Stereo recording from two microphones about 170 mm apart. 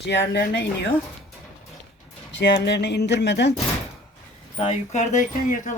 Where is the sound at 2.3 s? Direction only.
90° left.